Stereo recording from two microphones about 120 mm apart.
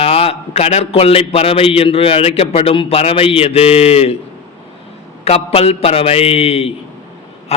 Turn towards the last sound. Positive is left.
turn(degrees=60)  # may be behind; listen again after turning